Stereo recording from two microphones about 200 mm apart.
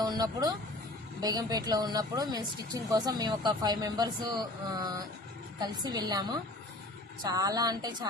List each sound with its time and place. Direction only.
0.0 s vehicle: 20° right (ahead or behind)
1.2 s speech: 20° right (ahead or behind)